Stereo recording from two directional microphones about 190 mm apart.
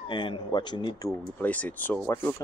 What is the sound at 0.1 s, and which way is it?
Speech, 25° left (ahead or behind).